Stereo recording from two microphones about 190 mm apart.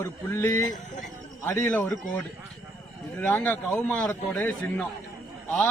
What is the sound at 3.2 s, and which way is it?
A man's voice, 5° left (ahead or behind).